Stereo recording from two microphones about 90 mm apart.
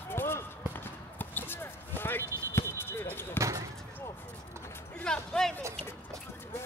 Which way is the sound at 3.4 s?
40° right (ahead or behind).